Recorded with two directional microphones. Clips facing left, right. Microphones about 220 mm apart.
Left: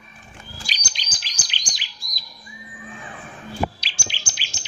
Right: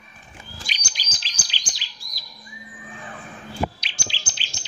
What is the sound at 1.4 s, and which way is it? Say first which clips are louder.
Chirp: left 1 dB; 15° left (ahead or behind).